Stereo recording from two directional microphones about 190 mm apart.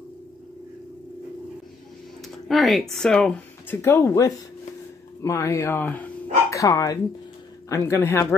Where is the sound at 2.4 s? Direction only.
Centre (ahead or behind).